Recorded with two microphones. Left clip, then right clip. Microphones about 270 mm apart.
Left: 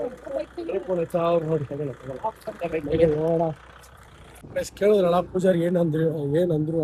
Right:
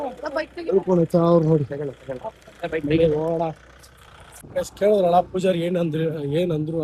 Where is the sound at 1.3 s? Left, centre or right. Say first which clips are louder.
Right 5 dB; right.